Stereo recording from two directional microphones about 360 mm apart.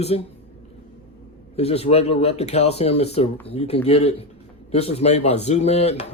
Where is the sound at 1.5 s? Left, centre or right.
Centre.